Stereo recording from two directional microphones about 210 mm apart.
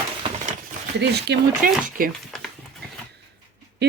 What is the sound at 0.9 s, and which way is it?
Speech, 50° right (ahead or behind).